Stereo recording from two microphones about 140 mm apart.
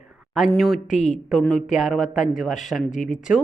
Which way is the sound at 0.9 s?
60° left (ahead or behind).